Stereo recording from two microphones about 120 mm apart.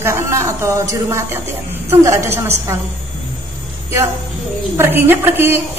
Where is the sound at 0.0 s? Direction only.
20° right (ahead or behind).